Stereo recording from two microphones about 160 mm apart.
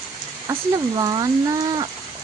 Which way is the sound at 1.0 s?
25° right (ahead or behind).